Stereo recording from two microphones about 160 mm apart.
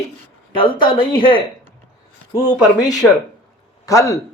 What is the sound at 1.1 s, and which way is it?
Speech, 35° left (ahead or behind).